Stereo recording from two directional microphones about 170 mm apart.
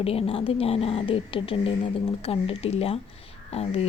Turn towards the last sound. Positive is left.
turn(degrees=35)  # may be behind; listen again after turning